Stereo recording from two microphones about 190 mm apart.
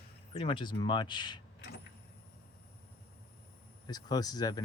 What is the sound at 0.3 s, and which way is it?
Speech, 30° left (ahead or behind).